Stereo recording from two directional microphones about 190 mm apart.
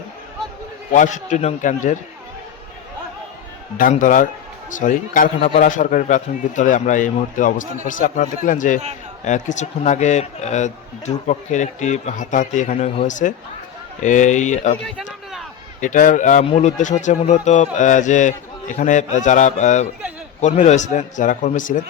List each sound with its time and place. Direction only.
0.9 s a man's voice: 40° left (ahead or behind)
3.8 s a man's voice: 45° left (ahead or behind)
14.8 s speech: centre (ahead or behind)
15.8 s a man's voice: 45° left (ahead or behind)